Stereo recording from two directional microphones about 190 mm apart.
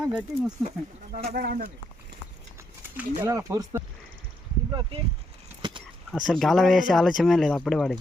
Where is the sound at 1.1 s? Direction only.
50° right (ahead or behind).